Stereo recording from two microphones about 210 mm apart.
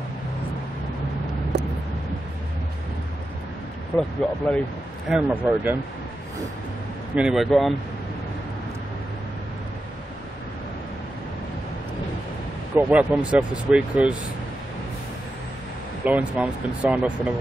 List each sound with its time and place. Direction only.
1.5 s vehicle: 55° right (ahead or behind)
3.9 s speech: 10° left (ahead or behind)
5.1 s speech: 5° right (ahead or behind)
7.2 s speech: centre (ahead or behind)
12.7 s speech: 5° right (ahead or behind)
16.0 s speech: 5° right (ahead or behind)